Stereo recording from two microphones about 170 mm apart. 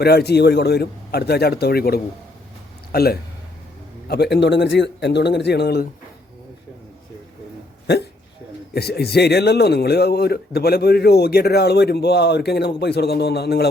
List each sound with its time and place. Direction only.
0.0 s a man's voice: 70° left (ahead or behind)
4.1 s speech: 75° left (ahead or behind)
8.7 s a man's voice: 70° left (ahead or behind)